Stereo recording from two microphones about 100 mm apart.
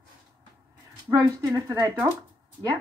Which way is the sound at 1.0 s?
30° right (ahead or behind).